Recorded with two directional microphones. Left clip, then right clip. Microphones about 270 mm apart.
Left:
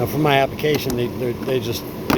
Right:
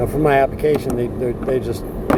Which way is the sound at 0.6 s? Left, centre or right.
Centre.